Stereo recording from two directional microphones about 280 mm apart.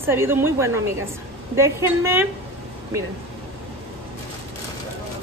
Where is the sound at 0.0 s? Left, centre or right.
Centre.